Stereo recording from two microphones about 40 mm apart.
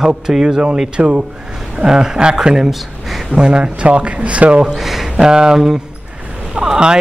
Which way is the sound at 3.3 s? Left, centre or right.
Right.